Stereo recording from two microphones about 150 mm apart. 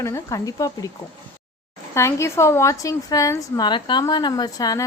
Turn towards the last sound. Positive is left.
turn(degrees=25)  # may be behind; listen again after turning